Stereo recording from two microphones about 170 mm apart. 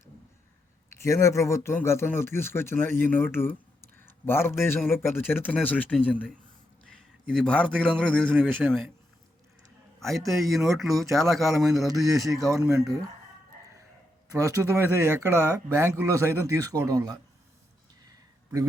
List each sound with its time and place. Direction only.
0.9 s a man's voice: 15° left (ahead or behind); by 8.8 s centre (ahead or behind)
10.0 s speech: centre (ahead or behind)
12.4 s speech: 20° right (ahead or behind)
14.3 s speech: 15° right (ahead or behind)